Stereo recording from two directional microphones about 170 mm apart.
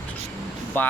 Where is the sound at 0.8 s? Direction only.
10° left (ahead or behind).